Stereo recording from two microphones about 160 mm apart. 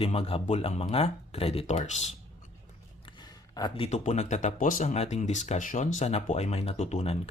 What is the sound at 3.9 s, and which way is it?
Speech, 45° left (ahead or behind).